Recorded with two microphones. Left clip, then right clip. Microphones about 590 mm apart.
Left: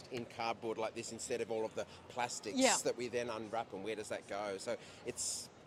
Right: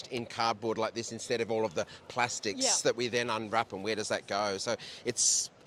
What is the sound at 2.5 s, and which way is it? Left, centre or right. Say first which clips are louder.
Speech: left 2 dB; left.